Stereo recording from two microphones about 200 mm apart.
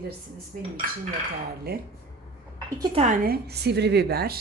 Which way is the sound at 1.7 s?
50° right (ahead or behind).